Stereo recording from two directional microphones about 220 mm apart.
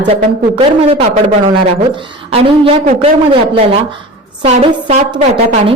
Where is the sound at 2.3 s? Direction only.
25° right (ahead or behind).